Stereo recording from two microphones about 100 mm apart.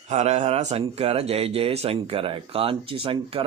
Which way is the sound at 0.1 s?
90° right.